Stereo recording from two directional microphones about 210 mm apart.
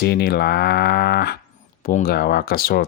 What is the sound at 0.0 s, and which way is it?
Speech, 50° left (ahead or behind).